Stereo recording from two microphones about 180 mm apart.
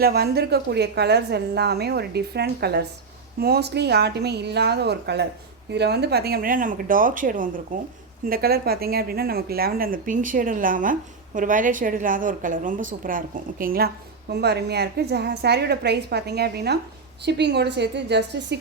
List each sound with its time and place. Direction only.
0.0 s a woman's voice: 60° right (ahead or behind)